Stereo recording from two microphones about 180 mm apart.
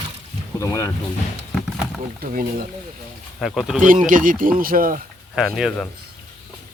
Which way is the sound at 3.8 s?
45° right (ahead or behind).